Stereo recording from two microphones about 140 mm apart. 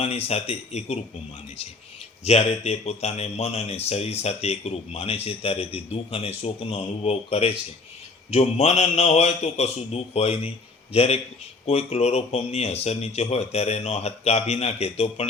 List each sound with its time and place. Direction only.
0.0 s speech: 45° left (ahead or behind)
2.2 s speech: 50° left (ahead or behind)